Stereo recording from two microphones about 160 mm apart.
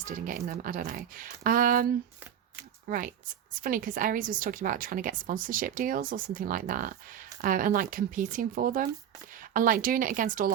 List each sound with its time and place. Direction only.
0.0 s speech: 55° right (ahead or behind)
2.9 s speech: 55° right (ahead or behind)